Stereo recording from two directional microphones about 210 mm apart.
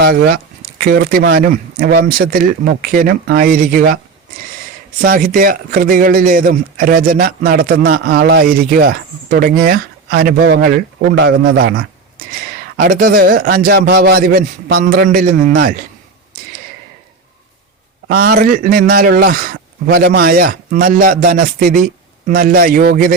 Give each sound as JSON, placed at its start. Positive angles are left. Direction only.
{"t": 0.0, "sound": "a man's voice", "side_deg": -50}
{"t": 4.9, "sound": "a man's voice", "side_deg": -40}
{"t": 18.1, "sound": "a man's voice", "side_deg": -45}